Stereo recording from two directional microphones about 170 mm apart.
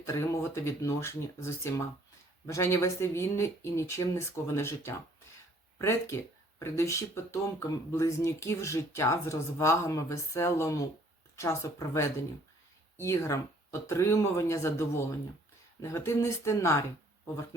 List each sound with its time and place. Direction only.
0.0 s speech: 15° left (ahead or behind)